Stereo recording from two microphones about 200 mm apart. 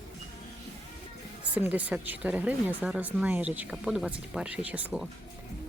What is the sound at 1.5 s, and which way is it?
Speech, 10° right (ahead or behind).